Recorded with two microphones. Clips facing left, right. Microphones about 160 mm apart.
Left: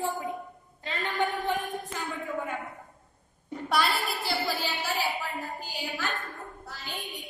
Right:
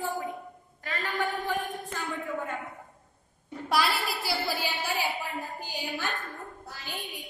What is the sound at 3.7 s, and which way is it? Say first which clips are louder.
A woman's voice: even; 5° right (ahead or behind).